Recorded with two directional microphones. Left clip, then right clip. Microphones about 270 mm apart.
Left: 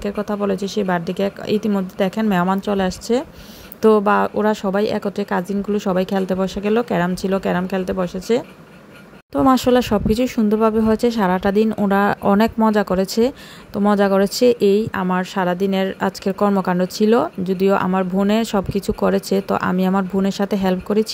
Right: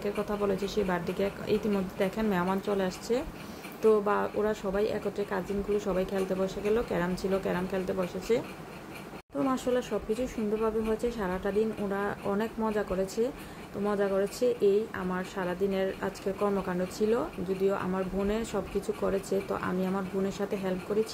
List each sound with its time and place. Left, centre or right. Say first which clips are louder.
0.0 s speech: left 8 dB; left